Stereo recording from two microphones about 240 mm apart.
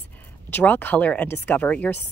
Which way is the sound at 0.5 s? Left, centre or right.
Centre.